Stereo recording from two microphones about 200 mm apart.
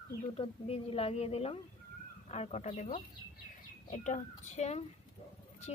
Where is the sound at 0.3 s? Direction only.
30° left (ahead or behind).